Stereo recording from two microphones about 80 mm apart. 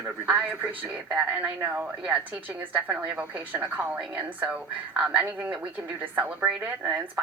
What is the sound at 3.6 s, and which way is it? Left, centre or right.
A woman's voice, centre.